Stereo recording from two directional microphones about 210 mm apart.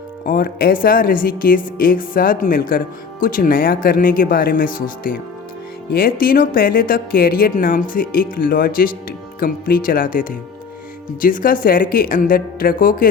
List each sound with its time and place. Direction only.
0.3 s a woman's voice: 45° left (ahead or behind)